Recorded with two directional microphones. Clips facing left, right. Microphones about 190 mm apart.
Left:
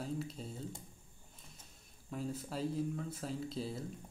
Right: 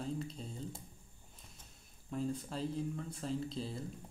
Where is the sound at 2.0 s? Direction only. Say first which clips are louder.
Right 3 dB; 5° left (ahead or behind).